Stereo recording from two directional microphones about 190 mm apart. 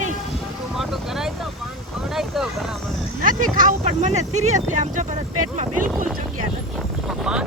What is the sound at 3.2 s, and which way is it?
Speech, 45° right (ahead or behind).